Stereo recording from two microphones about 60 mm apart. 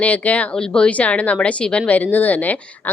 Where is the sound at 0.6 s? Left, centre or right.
Centre.